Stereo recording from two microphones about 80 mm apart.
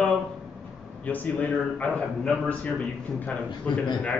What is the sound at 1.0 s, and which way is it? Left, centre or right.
A man's voice, centre.